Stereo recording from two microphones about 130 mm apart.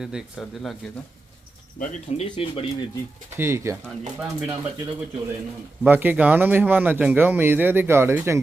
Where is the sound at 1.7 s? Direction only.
65° left (ahead or behind).